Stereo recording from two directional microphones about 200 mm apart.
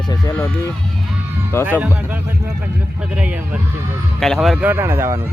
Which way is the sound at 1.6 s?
10° right (ahead or behind).